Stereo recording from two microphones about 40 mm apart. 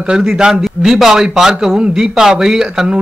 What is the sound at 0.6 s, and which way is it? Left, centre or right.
A man's voice, centre.